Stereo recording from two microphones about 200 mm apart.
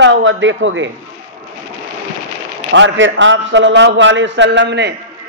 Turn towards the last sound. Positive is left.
turn(degrees=-60)  # may be behind; listen again after turning